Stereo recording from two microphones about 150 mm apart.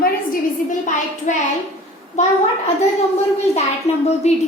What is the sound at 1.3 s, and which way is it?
Speech, 55° left (ahead or behind).